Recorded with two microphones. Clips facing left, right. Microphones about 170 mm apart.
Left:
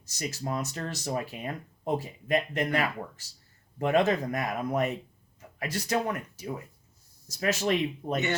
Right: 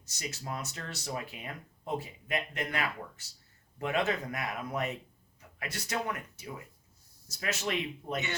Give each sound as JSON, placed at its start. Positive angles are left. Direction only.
{"t": 0.2, "sound": "speech", "side_deg": 40}